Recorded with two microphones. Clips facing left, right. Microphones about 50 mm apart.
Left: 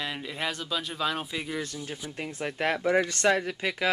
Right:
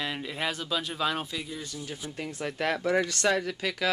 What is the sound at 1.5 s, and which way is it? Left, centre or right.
Speech, left.